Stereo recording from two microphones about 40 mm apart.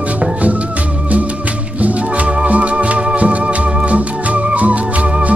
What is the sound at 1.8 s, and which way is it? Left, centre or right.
Music, right.